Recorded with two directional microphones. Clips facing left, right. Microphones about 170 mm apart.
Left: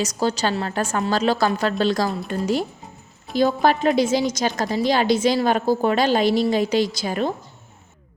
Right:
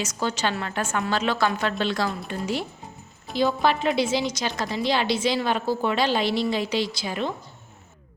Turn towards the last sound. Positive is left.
turn(degrees=45)  # may be behind; listen again after turning